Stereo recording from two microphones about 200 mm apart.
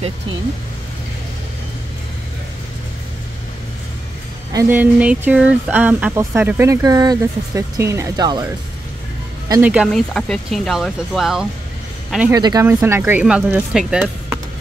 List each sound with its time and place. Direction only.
4.5 s speech: 15° right (ahead or behind)
9.5 s speech: 10° right (ahead or behind)
12.3 s speech: 20° right (ahead or behind); by 14.1 s 5° right (ahead or behind)